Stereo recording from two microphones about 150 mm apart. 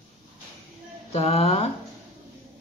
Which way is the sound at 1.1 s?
45° left (ahead or behind).